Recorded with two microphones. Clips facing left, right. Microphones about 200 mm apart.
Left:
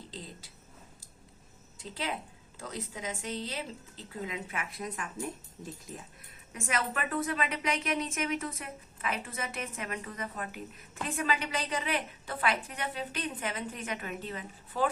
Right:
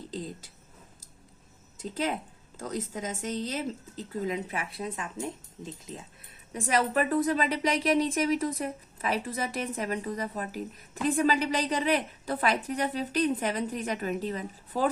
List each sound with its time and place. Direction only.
1.8 s speech: 45° right (ahead or behind); by 5.9 s 20° right (ahead or behind)
6.5 s a woman's voice: 35° right (ahead or behind)